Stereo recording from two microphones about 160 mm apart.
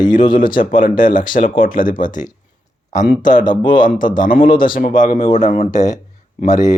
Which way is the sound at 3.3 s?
55° left (ahead or behind).